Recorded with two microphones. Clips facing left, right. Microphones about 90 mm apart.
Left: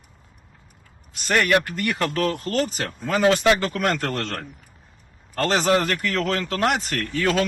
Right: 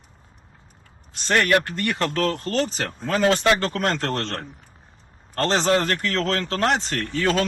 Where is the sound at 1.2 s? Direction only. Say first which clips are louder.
Even; 35° right (ahead or behind).